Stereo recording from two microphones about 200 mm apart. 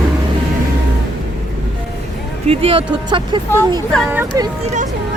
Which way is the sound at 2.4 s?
30° right (ahead or behind).